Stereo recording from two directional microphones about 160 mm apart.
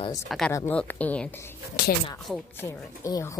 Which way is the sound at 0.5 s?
15° left (ahead or behind).